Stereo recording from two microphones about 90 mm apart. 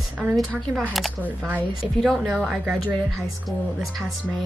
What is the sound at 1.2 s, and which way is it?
Speech, 20° right (ahead or behind).